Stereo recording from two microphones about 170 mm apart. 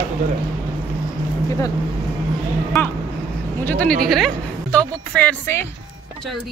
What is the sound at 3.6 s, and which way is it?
A woman's voice, 10° left (ahead or behind).